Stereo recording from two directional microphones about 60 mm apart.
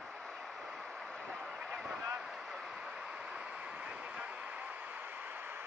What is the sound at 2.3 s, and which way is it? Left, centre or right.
Train, centre.